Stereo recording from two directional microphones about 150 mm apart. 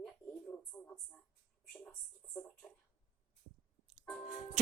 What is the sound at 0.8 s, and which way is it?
Speech, 5° left (ahead or behind).